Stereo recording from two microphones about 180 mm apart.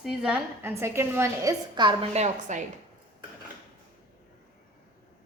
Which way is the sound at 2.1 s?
40° right (ahead or behind).